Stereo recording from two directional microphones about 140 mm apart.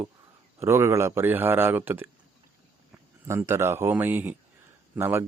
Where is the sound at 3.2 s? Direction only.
20° right (ahead or behind).